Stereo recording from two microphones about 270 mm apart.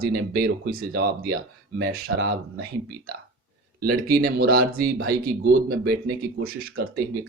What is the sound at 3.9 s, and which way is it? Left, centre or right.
Speech, right.